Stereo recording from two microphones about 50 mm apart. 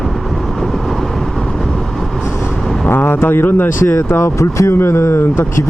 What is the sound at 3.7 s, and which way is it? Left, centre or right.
Speech, left.